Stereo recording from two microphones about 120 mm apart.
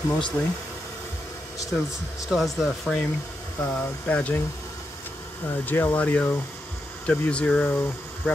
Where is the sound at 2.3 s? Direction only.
Centre (ahead or behind).